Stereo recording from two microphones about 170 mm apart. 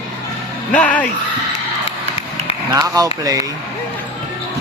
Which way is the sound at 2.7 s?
20° right (ahead or behind).